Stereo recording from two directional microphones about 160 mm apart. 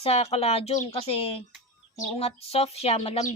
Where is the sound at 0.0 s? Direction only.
40° left (ahead or behind).